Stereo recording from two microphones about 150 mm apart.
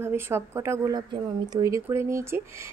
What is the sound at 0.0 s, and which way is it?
Speech, 15° right (ahead or behind).